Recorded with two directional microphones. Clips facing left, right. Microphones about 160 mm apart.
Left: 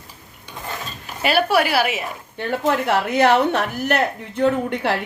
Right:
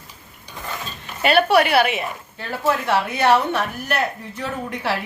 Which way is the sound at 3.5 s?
65° left (ahead or behind).